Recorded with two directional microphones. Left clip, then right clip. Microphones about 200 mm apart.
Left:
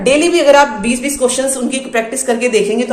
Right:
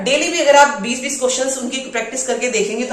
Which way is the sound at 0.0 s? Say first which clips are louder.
Left 5 dB; 55° left (ahead or behind).